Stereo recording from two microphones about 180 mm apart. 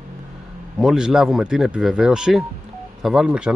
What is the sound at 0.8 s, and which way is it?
Speech, centre (ahead or behind).